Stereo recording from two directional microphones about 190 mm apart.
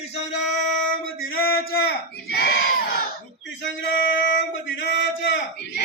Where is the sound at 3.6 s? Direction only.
75° left (ahead or behind).